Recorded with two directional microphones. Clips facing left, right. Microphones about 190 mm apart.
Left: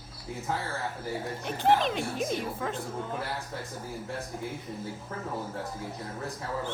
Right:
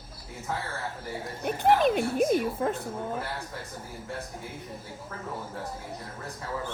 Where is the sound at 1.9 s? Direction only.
55° right (ahead or behind).